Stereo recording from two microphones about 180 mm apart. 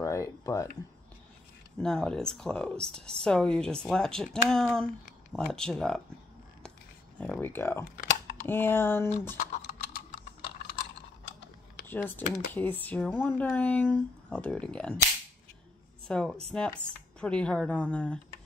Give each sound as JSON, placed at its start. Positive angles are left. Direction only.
{"t": 0.0, "sound": "a sound", "side_deg": 15}
{"t": 1.8, "sound": "speech", "side_deg": 5}
{"t": 7.2, "sound": "speech", "side_deg": 10}
{"t": 11.9, "sound": "speech", "side_deg": 10}
{"t": 16.1, "sound": "speech", "side_deg": 5}